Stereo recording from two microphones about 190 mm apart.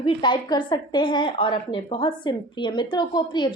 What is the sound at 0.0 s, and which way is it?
A woman's voice, 25° left (ahead or behind).